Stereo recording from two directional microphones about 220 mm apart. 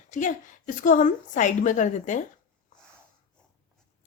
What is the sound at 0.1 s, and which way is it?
A woman's voice, 35° left (ahead or behind).